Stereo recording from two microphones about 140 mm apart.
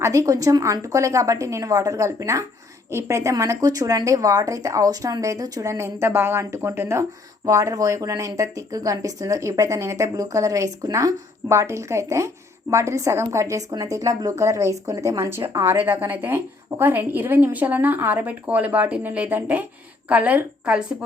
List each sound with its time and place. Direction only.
0.0 s a woman's voice: 20° right (ahead or behind)